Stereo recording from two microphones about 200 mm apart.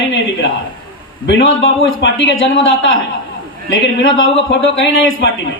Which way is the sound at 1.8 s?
70° left (ahead or behind).